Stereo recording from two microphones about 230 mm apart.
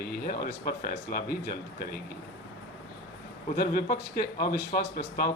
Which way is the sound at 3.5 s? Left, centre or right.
Left.